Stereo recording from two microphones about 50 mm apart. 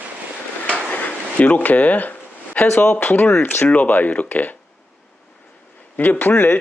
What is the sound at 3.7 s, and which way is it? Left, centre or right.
Speech, left.